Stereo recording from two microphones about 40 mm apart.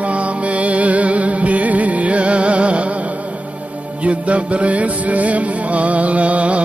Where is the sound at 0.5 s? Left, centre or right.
Right.